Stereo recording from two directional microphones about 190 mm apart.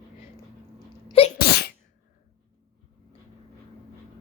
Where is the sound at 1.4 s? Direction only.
55° left (ahead or behind).